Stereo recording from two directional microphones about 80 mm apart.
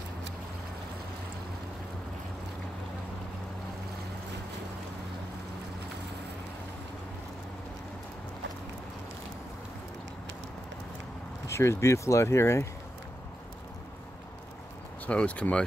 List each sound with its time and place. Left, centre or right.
11.4 s speech: left
15.0 s speech: centre